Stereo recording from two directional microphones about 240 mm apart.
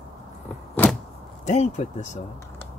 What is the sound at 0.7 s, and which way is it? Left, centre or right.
Vehicle, centre.